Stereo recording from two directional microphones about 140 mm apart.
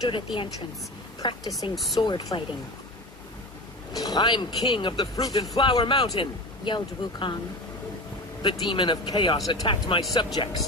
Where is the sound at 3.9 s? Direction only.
30° left (ahead or behind).